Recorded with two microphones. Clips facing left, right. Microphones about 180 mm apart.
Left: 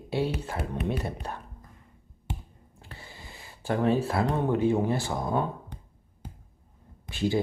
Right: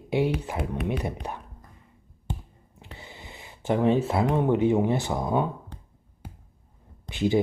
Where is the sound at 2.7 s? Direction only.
20° right (ahead or behind).